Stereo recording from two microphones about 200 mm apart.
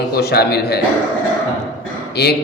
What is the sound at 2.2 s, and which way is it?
Speech, 55° left (ahead or behind).